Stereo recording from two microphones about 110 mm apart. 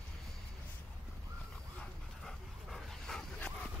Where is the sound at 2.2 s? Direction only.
5° left (ahead or behind).